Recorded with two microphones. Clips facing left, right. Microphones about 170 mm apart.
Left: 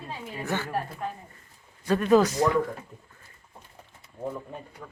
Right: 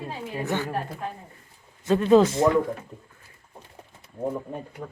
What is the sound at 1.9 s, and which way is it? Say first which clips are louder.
Speech: right 3 dB; 25° right (ahead or behind).